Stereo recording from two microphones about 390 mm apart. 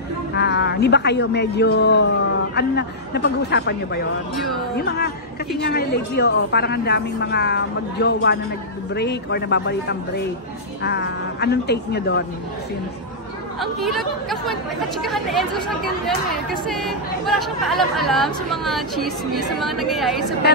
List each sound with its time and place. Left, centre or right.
0.4 s a woman's voice: left
13.6 s speech: centre
16.4 s speech: centre